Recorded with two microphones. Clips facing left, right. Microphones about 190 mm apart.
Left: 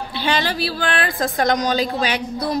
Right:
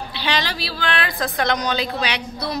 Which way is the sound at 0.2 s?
50° left (ahead or behind).